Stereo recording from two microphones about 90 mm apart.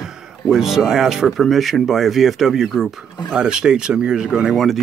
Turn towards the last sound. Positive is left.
turn(degrees=-10)  # may be behind; listen again after turning